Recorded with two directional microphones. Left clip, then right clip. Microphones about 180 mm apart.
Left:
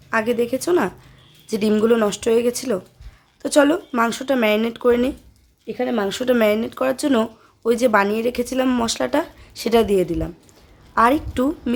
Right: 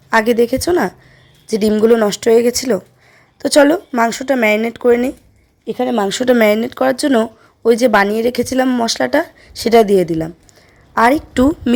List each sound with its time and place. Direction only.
0.1 s a woman's voice: 40° right (ahead or behind); by 5.1 s 20° right (ahead or behind)
5.6 s a woman's voice: 35° right (ahead or behind)